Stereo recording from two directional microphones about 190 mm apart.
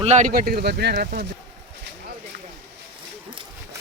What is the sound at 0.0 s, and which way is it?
Speech, 40° right (ahead or behind).